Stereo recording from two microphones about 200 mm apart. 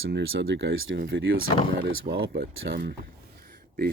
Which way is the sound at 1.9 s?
50° right (ahead or behind).